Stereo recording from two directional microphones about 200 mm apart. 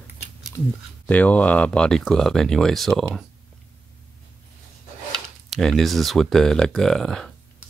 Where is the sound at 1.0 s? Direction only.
5° left (ahead or behind).